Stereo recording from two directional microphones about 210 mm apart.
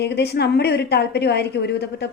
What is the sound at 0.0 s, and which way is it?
A woman's voice, 50° left (ahead or behind).